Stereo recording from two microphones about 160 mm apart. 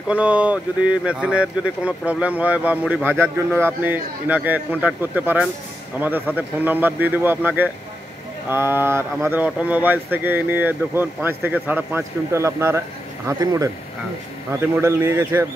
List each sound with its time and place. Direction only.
0.1 s speech: 10° right (ahead or behind)